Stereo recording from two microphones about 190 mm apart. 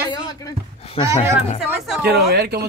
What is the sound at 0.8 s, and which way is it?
Speech, 30° left (ahead or behind).